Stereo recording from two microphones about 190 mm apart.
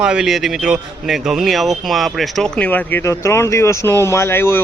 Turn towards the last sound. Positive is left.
turn(degrees=10)  # may be behind; listen again after turning